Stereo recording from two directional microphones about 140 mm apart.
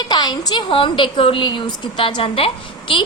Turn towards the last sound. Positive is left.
turn(degrees=40)  # may be behind; listen again after turning